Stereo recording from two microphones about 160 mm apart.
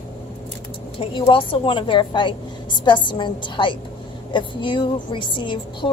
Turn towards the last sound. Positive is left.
turn(degrees=30)  # may be behind; listen again after turning